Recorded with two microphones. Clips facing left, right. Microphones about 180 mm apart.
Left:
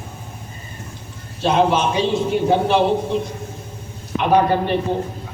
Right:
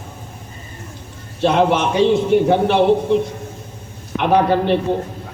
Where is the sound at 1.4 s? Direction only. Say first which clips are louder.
Right 2 dB; 60° right (ahead or behind).